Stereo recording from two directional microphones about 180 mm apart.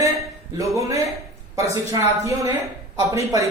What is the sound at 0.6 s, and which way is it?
Speech, 15° right (ahead or behind).